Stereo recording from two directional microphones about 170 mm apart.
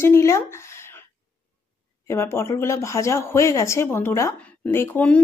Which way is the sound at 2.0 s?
15° left (ahead or behind).